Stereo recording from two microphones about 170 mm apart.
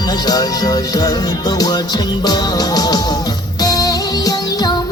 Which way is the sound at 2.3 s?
25° left (ahead or behind).